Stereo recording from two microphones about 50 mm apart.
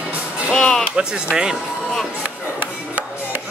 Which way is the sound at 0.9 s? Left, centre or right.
Centre.